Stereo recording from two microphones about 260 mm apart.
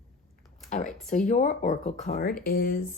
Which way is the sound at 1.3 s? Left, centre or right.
Left.